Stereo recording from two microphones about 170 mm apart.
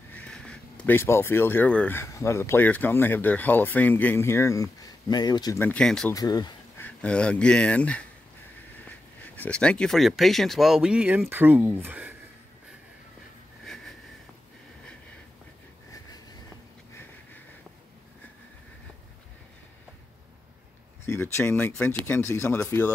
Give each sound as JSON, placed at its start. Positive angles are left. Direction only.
{"t": 0.1, "sound": "speech", "side_deg": 5}
{"t": 5.6, "sound": "speech", "side_deg": 5}
{"t": 6.1, "sound": "speech", "side_deg": 20}
{"t": 6.8, "sound": "speech", "side_deg": 5}
{"t": 21.0, "sound": "speech", "side_deg": 15}